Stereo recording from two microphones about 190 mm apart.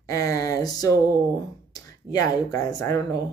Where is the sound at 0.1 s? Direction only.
15° left (ahead or behind).